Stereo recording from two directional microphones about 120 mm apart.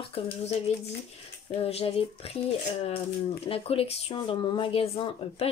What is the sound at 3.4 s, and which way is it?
Speech, 50° left (ahead or behind).